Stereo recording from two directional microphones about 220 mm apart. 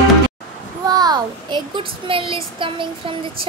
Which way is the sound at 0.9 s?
15° right (ahead or behind).